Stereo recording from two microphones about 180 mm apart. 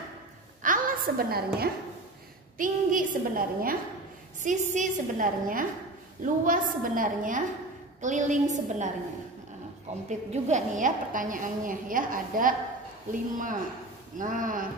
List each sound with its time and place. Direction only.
0.6 s a sound: 50° right (ahead or behind)
2.5 s a woman's voice: 50° right (ahead or behind)
10.0 s a woman's voice: 40° right (ahead or behind)